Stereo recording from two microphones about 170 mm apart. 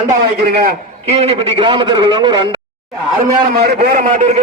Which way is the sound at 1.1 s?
35° right (ahead or behind).